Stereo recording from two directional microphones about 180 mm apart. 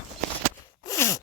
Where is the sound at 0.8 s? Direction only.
20° left (ahead or behind).